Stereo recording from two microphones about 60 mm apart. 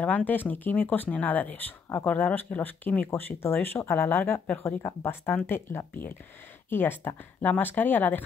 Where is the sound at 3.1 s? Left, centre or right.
Left.